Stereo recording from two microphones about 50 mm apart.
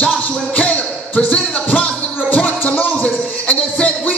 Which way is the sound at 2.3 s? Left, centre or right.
Left.